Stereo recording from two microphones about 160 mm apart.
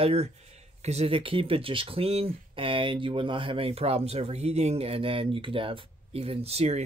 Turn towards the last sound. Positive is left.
turn(degrees=-40)  # may be behind; listen again after turning